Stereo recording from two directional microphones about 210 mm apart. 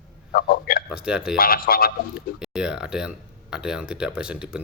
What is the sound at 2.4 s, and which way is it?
Speech, 5° right (ahead or behind).